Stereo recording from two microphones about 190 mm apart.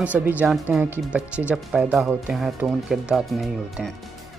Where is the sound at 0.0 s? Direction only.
10° right (ahead or behind).